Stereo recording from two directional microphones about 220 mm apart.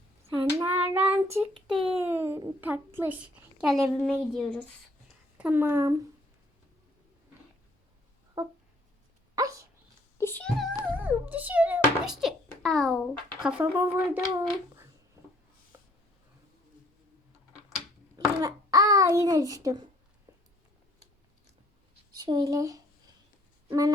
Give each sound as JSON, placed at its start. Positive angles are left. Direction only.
{"t": 0.3, "sound": "child singing", "side_deg": -10}
{"t": 1.7, "sound": "speech", "side_deg": -25}
{"t": 2.0, "sound": "a child's voice", "side_deg": -10}
{"t": 5.4, "sound": "a child's voice", "side_deg": -10}
{"t": 8.4, "sound": "a child's voice", "side_deg": -15}
{"t": 9.3, "sound": "dog", "side_deg": -15}
{"t": 10.2, "sound": "speech", "side_deg": 10}
{"t": 10.9, "sound": "a sound", "side_deg": -10}
{"t": 13.4, "sound": "a child's voice", "side_deg": -5}
{"t": 15.7, "sound": "writing", "side_deg": -10}
{"t": 18.3, "sound": "a child's voice", "side_deg": -15}
{"t": 22.2, "sound": "a child's voice", "side_deg": -20}
{"t": 23.6, "sound": "a sound", "side_deg": -15}